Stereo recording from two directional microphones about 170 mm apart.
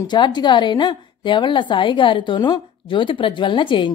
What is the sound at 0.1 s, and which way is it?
A woman's voice, 25° left (ahead or behind).